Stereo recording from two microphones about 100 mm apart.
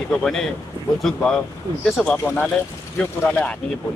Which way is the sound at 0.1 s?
5° left (ahead or behind).